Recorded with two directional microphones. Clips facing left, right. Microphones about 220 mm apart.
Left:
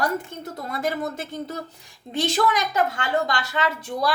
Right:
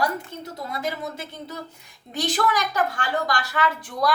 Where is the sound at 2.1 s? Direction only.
25° left (ahead or behind).